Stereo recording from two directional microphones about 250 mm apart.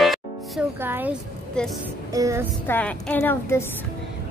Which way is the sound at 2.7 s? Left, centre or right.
Centre.